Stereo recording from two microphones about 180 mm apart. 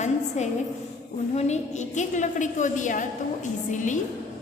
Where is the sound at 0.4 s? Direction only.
40° left (ahead or behind).